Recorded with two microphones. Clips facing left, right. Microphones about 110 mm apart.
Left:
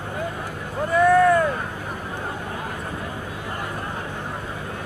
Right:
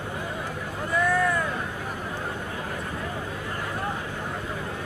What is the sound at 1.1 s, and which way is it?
Vehicle, 55° left (ahead or behind).